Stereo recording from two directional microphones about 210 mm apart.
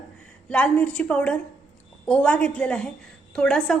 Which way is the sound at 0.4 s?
5° left (ahead or behind).